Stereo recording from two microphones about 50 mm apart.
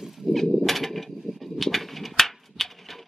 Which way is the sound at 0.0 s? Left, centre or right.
Centre.